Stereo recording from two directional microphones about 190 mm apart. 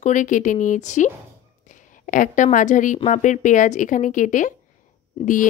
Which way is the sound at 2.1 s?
45° left (ahead or behind).